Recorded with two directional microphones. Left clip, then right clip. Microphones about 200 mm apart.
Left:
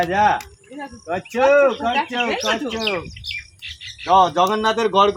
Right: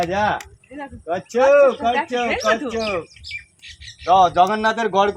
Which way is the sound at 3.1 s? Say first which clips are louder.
Left 4 dB; 50° right (ahead or behind).